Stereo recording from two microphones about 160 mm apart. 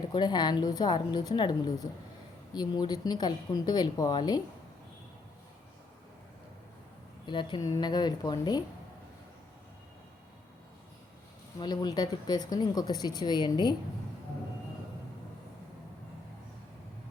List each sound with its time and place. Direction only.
0.1 s speech: 25° left (ahead or behind)
7.3 s speech: 30° left (ahead or behind)
11.6 s speech: 25° left (ahead or behind)